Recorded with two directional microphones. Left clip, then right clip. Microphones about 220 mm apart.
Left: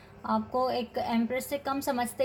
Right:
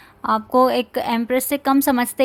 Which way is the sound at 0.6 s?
45° right (ahead or behind).